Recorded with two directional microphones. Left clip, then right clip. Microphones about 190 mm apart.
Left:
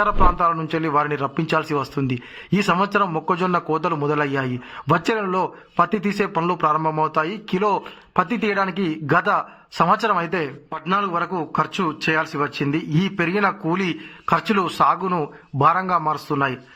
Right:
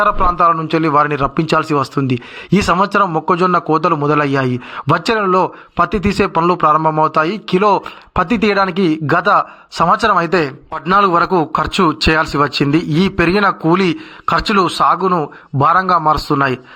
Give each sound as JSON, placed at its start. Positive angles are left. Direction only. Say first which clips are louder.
{"t": 0.0, "sound": "a man's voice", "louder": "right 6 dB", "side_deg": -25}
{"t": 10.7, "sound": "a man's voice", "louder": "right 10 dB", "side_deg": -40}